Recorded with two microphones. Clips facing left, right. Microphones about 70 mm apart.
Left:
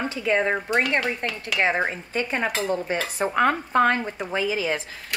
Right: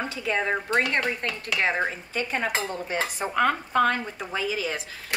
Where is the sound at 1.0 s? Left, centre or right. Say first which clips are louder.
Left 1 dB; centre.